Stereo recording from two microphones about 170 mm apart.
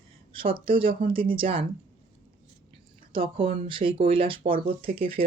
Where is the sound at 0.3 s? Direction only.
30° right (ahead or behind).